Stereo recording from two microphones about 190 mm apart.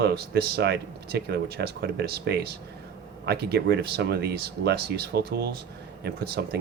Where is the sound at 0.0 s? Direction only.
55° right (ahead or behind).